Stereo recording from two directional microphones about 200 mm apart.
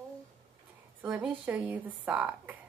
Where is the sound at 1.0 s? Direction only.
5° right (ahead or behind).